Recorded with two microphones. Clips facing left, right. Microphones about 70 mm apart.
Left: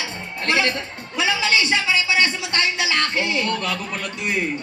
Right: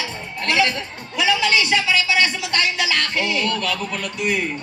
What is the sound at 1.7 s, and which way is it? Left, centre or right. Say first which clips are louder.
A man's voice: right 1 dB; left.